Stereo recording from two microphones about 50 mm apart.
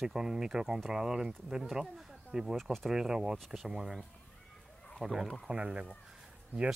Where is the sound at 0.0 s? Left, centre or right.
Centre.